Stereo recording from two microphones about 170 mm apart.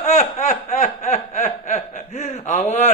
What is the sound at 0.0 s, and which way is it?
Snicker, 45° left (ahead or behind).